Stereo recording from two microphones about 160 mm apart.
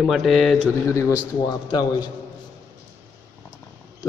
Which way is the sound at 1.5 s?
25° left (ahead or behind).